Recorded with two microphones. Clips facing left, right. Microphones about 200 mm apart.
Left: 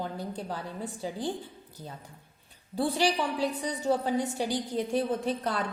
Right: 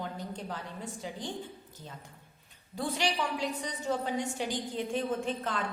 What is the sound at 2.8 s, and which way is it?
A woman's voice, 35° left (ahead or behind).